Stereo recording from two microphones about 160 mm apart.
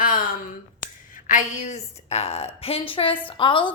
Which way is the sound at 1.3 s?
50° left (ahead or behind).